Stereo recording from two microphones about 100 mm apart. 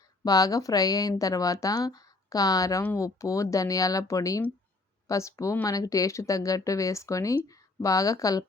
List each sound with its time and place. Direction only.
0.3 s speech: 40° left (ahead or behind)